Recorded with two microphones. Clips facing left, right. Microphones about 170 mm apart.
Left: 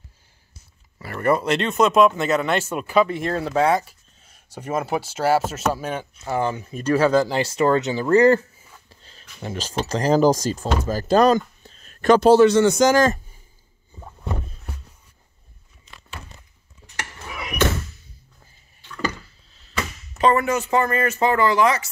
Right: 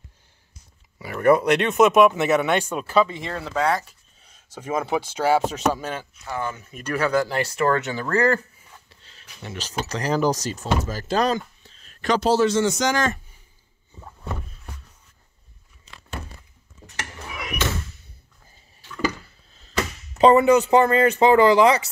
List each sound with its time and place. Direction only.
0.9 s speech: centre (ahead or behind); by 3.8 s 25° left (ahead or behind)
4.5 s speech: 10° left (ahead or behind)
6.2 s speech: 30° left (ahead or behind)
9.4 s speech: 35° left (ahead or behind)
10.0 s speech: 45° left (ahead or behind)
18.9 s a sound: 10° right (ahead or behind)
20.2 s speech: 25° right (ahead or behind)